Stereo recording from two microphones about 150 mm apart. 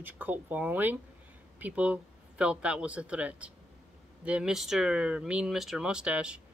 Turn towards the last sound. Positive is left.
turn(degrees=-5)  # may be behind; listen again after turning